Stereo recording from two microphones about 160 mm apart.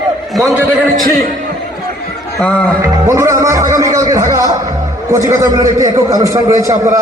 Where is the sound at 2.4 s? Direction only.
5° left (ahead or behind).